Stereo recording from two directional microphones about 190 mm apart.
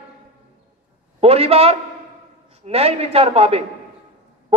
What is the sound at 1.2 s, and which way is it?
A man's voice, 30° right (ahead or behind).